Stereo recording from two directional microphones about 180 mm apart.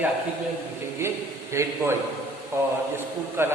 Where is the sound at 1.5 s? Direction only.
15° right (ahead or behind).